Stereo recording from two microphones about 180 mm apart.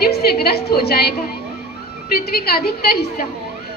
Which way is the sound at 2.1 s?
60° left (ahead or behind).